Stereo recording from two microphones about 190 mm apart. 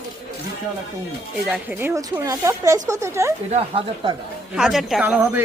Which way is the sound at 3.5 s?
30° right (ahead or behind).